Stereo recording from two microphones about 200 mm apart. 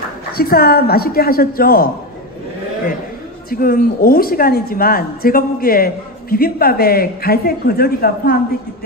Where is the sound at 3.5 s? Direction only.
45° left (ahead or behind).